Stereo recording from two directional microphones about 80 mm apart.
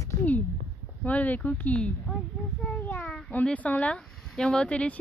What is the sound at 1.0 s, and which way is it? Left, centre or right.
Speech, centre.